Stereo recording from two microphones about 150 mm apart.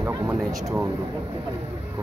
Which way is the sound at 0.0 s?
15° right (ahead or behind).